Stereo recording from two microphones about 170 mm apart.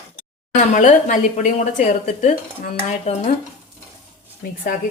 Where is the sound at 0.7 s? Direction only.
45° left (ahead or behind).